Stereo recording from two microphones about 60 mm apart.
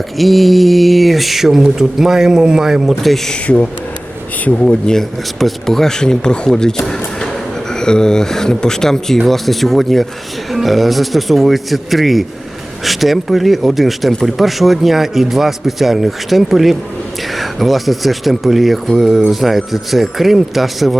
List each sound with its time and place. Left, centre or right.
0.2 s speech: centre
3.4 s speech: left
4.9 s speech: centre